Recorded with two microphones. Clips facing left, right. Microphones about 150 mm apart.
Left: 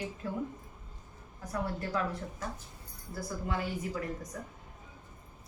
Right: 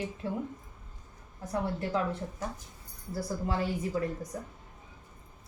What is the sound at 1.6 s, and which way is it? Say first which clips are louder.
Speech: right 3 dB; 25° right (ahead or behind).